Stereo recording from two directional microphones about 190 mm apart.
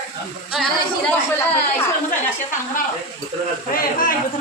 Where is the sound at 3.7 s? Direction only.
50° left (ahead or behind).